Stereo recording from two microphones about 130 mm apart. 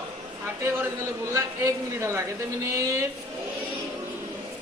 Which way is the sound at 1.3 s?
20° right (ahead or behind).